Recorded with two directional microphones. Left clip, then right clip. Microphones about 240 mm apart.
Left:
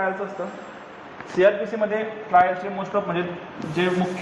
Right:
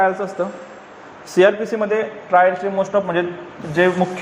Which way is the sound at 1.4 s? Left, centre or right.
Right.